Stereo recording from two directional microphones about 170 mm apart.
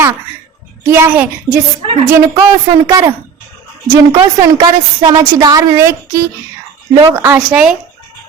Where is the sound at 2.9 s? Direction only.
20° right (ahead or behind).